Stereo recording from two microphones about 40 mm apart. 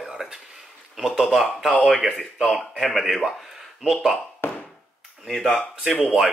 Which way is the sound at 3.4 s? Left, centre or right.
Centre.